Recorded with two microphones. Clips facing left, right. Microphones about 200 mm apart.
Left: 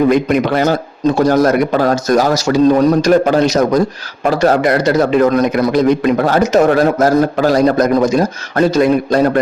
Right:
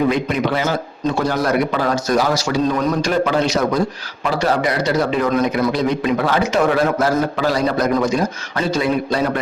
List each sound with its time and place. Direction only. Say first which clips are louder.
0.1 s a man's voice: left 6 dB; 45° left (ahead or behind)